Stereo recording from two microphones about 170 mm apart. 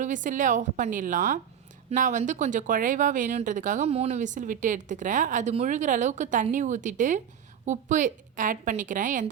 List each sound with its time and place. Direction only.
0.0 s speech: 50° right (ahead or behind)